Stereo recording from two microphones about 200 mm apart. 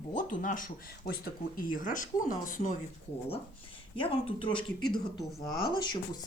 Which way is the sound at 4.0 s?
25° left (ahead or behind).